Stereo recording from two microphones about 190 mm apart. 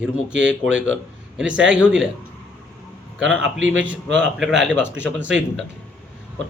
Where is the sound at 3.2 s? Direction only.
Centre (ahead or behind).